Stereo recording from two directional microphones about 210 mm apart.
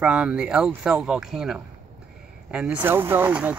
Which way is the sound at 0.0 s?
5° right (ahead or behind).